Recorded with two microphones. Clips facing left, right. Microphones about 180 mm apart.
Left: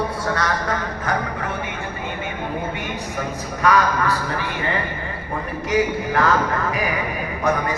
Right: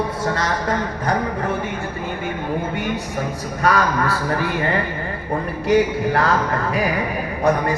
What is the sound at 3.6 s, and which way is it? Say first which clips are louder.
Music: even; 35° right (ahead or behind).